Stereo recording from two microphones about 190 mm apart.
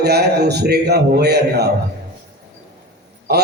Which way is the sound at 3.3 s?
55° right (ahead or behind).